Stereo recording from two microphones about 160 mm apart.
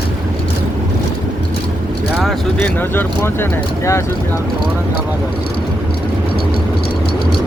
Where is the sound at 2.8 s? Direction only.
15° left (ahead or behind).